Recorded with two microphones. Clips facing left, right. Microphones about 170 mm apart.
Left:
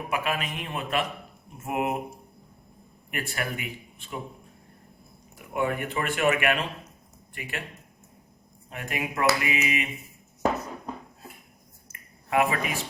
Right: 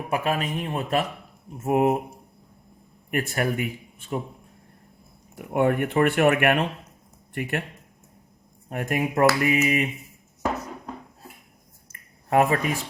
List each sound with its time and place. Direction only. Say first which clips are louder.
0.1 s speech: right 5 dB; 40° right (ahead or behind)
3.1 s a man's voice: right 7 dB; 45° right (ahead or behind)
5.5 s speech: right 7 dB; 55° right (ahead or behind)
8.7 s a man's voice: right 7 dB; 45° right (ahead or behind)
11.9 s finger snapping: right 4 dB; 40° right (ahead or behind)